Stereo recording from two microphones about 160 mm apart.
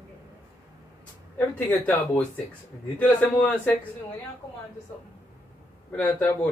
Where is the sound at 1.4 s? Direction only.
10° left (ahead or behind).